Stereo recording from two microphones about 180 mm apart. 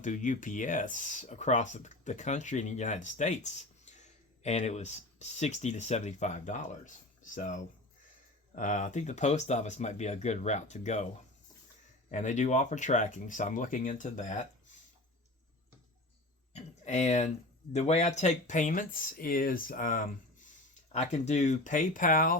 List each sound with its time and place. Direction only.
0.0 s speech: 45° left (ahead or behind)
12.1 s speech: 40° left (ahead or behind)
16.5 s a sound: 40° left (ahead or behind)
17.7 s speech: 40° left (ahead or behind)